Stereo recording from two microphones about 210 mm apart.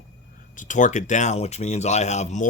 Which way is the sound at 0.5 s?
35° left (ahead or behind).